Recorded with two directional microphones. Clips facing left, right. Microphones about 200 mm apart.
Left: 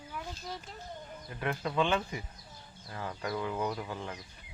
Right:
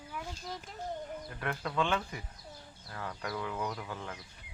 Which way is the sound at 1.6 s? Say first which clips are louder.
Left 2 dB; 15° left (ahead or behind).